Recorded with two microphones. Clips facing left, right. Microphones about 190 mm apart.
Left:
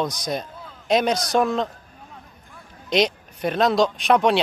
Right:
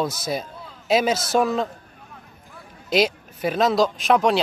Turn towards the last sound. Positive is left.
turn(degrees=0)  # may be behind; listen again after turning